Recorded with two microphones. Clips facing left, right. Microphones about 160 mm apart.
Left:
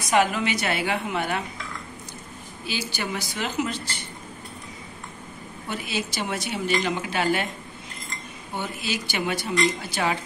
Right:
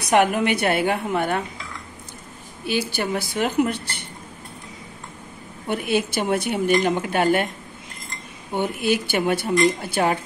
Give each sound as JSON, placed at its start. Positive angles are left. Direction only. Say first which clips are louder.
{"t": 0.0, "sound": "a woman's voice", "louder": "right 4 dB", "side_deg": -60}
{"t": 2.6, "sound": "a woman's voice", "louder": "right 7 dB", "side_deg": -60}
{"t": 5.7, "sound": "a woman's voice", "louder": "right 8 dB", "side_deg": -55}
{"t": 8.5, "sound": "a woman's voice", "louder": "right 8 dB", "side_deg": -55}